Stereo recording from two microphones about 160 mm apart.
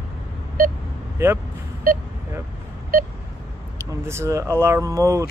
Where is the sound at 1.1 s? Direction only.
15° right (ahead or behind).